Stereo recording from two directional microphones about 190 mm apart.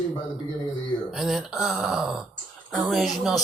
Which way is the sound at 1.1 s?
Centre (ahead or behind).